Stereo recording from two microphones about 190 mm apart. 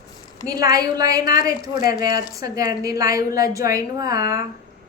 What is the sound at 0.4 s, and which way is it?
A woman's voice, 20° right (ahead or behind).